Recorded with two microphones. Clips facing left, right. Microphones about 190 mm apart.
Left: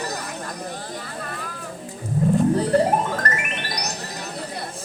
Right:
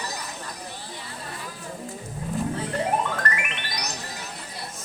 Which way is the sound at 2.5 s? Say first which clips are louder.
Left 7 dB; 40° left (ahead or behind).